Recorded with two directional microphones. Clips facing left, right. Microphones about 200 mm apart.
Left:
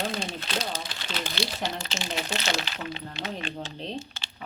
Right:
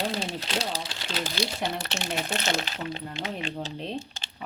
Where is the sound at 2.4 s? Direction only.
45° right (ahead or behind).